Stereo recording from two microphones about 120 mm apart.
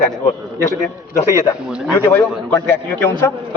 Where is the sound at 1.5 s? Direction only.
30° left (ahead or behind).